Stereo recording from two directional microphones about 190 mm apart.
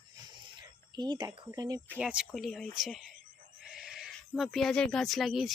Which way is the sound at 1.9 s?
5° right (ahead or behind).